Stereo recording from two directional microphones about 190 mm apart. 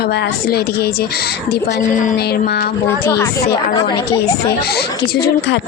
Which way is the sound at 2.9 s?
15° left (ahead or behind).